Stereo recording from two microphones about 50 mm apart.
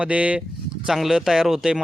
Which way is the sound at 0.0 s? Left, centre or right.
Right.